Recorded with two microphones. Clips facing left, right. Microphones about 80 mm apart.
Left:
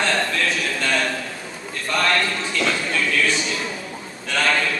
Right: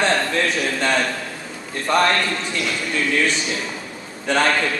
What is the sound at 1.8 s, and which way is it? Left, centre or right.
Speech, right.